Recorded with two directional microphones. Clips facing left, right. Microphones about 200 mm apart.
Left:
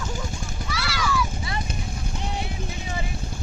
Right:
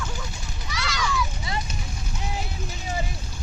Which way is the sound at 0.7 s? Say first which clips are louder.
Right 1 dB; 5° left (ahead or behind).